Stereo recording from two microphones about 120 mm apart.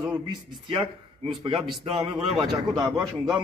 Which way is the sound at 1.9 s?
40° right (ahead or behind).